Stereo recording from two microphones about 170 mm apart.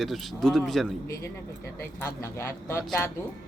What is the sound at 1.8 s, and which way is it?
Speech, 15° left (ahead or behind).